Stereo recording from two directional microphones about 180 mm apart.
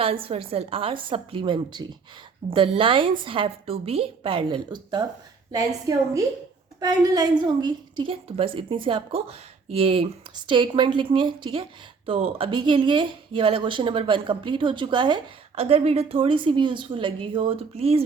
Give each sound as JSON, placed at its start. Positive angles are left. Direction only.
{"t": 0.0, "sound": "a woman's voice", "side_deg": -30}